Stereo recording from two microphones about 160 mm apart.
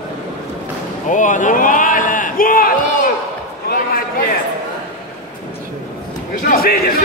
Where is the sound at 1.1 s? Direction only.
50° left (ahead or behind); by 3.8 s 70° left (ahead or behind).